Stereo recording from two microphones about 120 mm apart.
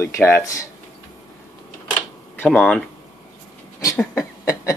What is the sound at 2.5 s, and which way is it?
Speech, 10° left (ahead or behind).